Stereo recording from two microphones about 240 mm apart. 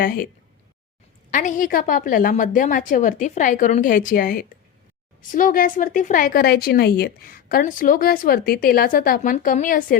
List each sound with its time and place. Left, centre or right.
0.0 s a woman's voice: left
1.3 s a woman's voice: left